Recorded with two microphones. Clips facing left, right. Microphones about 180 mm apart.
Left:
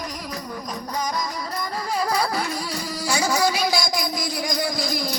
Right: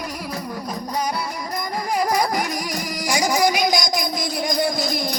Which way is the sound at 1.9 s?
15° right (ahead or behind).